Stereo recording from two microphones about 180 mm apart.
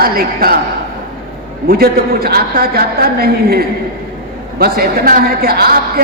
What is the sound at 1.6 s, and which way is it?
A woman's voice, 55° right (ahead or behind).